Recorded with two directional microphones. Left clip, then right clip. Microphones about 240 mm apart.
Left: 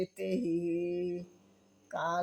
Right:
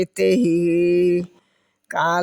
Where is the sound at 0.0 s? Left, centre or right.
Right.